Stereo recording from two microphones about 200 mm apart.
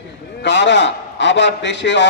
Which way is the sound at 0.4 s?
65° left (ahead or behind).